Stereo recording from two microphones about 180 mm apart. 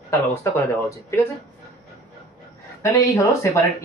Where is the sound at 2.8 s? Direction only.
15° left (ahead or behind).